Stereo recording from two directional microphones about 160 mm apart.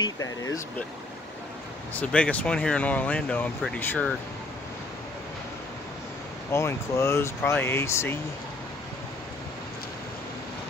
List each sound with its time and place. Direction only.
0.0 s speech: 20° left (ahead or behind)
2.0 s speech: 10° left (ahead or behind)
6.5 s speech: 15° left (ahead or behind)